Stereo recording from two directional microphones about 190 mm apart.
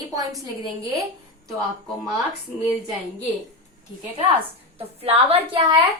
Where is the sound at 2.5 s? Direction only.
40° left (ahead or behind).